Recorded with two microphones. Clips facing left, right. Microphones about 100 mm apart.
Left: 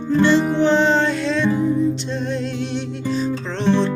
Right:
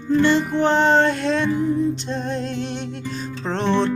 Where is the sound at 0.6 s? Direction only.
50° right (ahead or behind).